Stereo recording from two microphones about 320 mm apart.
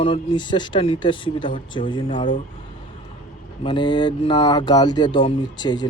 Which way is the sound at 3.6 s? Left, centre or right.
Centre.